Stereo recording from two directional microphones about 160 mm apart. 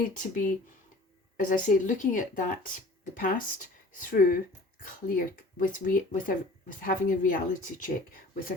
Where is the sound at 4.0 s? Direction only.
55° left (ahead or behind).